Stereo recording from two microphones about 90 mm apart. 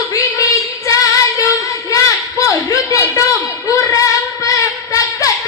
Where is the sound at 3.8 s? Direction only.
35° left (ahead or behind).